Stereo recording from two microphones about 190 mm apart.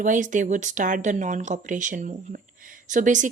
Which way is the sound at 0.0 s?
45° right (ahead or behind).